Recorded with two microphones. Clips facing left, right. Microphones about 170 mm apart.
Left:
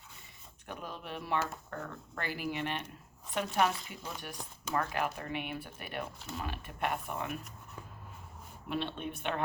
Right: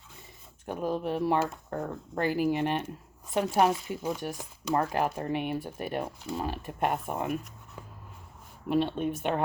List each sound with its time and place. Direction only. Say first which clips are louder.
0.7 s speech: right 12 dB; 40° right (ahead or behind)
8.7 s speech: right 9 dB; 40° right (ahead or behind)